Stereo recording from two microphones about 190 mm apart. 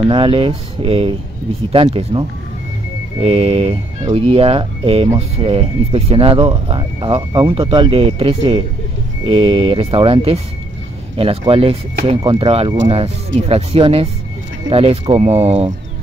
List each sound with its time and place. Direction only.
0.0 s speech: 30° right (ahead or behind)